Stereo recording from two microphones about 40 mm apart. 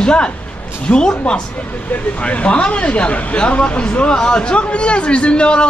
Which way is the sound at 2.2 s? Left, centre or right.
Left.